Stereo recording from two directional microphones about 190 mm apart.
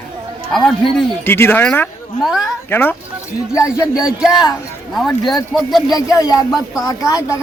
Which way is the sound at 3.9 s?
5° right (ahead or behind).